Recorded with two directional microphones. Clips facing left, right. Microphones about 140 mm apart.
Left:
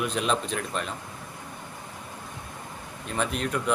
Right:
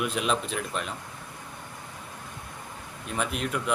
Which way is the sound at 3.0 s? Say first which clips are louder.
Left 1 dB; 5° right (ahead or behind).